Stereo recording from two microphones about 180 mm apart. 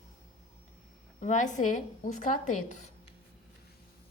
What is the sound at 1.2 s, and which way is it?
A woman's voice, 45° left (ahead or behind).